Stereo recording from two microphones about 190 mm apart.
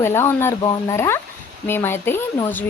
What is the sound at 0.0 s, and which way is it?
Speech, 10° left (ahead or behind).